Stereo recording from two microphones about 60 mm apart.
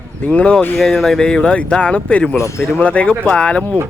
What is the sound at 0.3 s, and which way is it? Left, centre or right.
Speech, centre.